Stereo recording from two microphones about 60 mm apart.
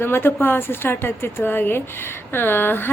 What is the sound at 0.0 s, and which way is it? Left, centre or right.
A woman's voice, left.